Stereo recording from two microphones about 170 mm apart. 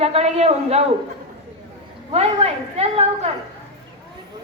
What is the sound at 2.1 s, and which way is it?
Speech, 35° right (ahead or behind).